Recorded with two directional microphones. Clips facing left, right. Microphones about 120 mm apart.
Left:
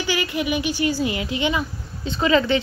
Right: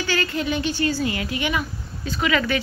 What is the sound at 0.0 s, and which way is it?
A woman's voice, 15° left (ahead or behind).